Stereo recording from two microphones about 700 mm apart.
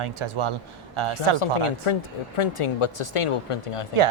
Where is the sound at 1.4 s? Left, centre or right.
Left.